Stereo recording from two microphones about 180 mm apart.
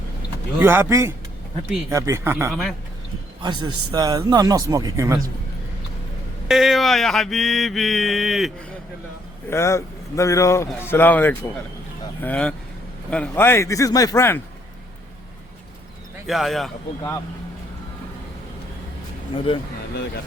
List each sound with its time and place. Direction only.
0.6 s speech: 15° right (ahead or behind)
2.5 s mantra: centre (ahead or behind)
3.4 s speech: 25° right (ahead or behind)
6.5 s mantra: centre (ahead or behind)
9.5 s a man's voice: 15° left (ahead or behind)
16.2 s mantra: centre (ahead or behind)
19.5 s speech: 30° left (ahead or behind)